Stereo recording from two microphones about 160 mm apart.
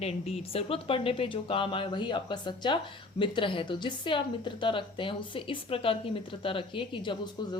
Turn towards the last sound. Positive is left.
turn(degrees=30)  # may be behind; listen again after turning